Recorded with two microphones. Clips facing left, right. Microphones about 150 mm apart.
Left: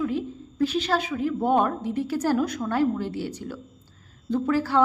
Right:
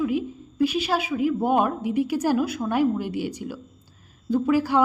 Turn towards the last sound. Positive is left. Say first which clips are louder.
# right 2 dB
turn(degrees=-15)  # may be behind; listen again after turning